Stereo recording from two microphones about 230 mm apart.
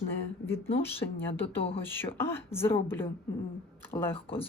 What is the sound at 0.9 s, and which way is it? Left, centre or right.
Speech, left.